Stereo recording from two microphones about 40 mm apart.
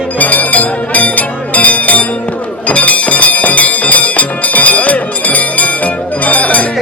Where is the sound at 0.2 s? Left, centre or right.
Left.